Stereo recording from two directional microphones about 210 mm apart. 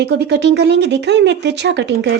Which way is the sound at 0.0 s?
55° right (ahead or behind).